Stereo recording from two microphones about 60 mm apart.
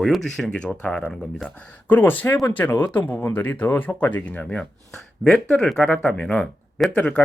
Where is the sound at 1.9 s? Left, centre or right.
Left.